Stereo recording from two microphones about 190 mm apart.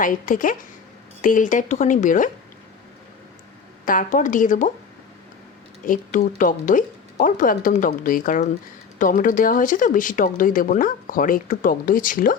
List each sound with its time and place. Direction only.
0.0 s speech: 45° left (ahead or behind)
3.8 s speech: 45° left (ahead or behind)
5.8 s speech: 45° left (ahead or behind)